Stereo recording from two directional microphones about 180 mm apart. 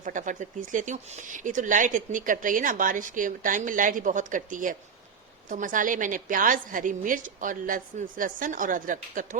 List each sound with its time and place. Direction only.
0.0 s speech: 45° right (ahead or behind)